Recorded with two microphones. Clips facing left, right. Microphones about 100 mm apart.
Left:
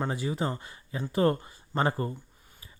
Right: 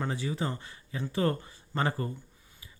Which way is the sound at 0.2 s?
30° left (ahead or behind).